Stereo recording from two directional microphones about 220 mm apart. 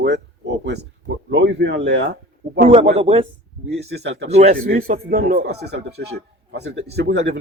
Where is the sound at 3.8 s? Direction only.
50° right (ahead or behind).